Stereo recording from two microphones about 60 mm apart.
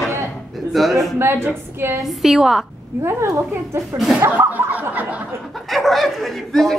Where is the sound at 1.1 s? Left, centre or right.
Right.